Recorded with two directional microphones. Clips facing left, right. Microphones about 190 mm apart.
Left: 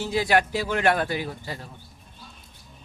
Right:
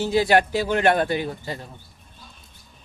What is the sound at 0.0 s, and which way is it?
Speech, 30° right (ahead or behind).